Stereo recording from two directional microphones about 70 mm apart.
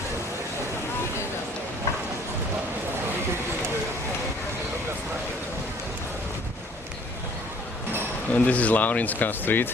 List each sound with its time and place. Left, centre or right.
8.3 s speech: centre